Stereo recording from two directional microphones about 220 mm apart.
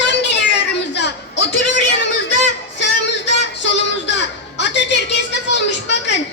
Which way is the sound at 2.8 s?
50° left (ahead or behind).